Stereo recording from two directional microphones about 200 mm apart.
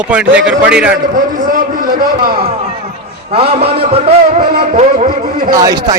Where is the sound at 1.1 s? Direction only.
45° right (ahead or behind).